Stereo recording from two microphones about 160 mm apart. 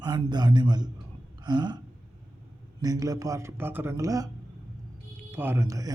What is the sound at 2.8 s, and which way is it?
A man's voice, 25° right (ahead or behind).